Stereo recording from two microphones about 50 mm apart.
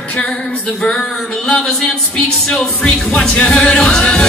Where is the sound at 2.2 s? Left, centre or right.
Centre.